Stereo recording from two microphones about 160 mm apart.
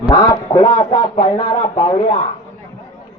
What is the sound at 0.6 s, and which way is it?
Music, 35° left (ahead or behind).